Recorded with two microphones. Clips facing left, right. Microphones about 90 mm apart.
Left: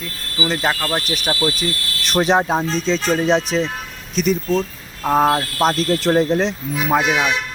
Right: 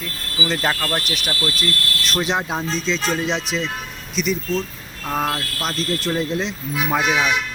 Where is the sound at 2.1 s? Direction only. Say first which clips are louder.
Left 7 dB; 55° left (ahead or behind).